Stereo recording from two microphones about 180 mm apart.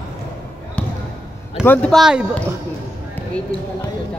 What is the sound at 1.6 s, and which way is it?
Speech, 10° left (ahead or behind).